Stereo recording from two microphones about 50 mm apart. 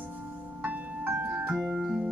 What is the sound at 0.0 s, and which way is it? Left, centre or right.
Music, right.